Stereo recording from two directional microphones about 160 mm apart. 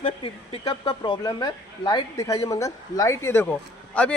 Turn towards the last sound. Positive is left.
turn(degrees=10)  # may be behind; listen again after turning